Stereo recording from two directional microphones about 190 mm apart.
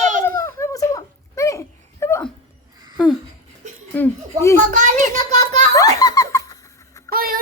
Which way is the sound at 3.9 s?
10° left (ahead or behind).